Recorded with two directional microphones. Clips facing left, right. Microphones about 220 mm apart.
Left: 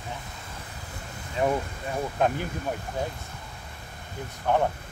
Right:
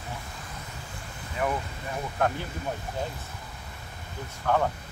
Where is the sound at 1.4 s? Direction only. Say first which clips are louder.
Left 4 dB; 25° left (ahead or behind).